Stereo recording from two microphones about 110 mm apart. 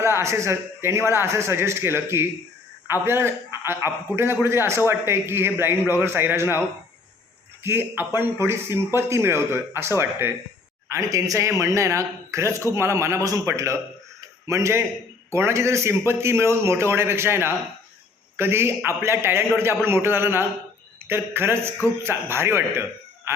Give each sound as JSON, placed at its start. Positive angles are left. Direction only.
{"t": 0.0, "sound": "a man's voice", "side_deg": -25}
{"t": 7.6, "sound": "a man's voice", "side_deg": -20}